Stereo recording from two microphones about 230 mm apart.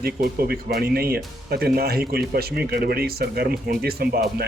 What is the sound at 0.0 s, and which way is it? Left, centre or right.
Speech, right.